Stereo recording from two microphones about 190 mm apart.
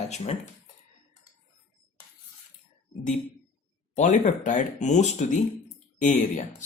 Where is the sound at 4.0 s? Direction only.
40° left (ahead or behind).